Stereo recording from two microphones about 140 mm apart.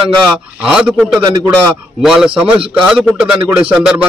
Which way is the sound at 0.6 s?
5° right (ahead or behind).